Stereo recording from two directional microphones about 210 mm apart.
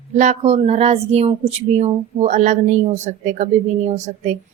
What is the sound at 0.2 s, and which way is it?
A woman's voice, 35° right (ahead or behind).